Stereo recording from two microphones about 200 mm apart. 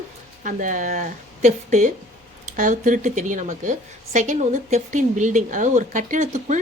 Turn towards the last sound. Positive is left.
turn(degrees=-40)  # may be behind; listen again after turning